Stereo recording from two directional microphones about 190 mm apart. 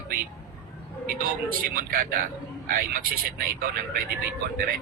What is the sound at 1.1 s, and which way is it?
Speech, 50° right (ahead or behind).